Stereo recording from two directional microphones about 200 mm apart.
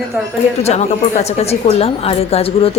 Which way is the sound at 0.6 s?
35° left (ahead or behind).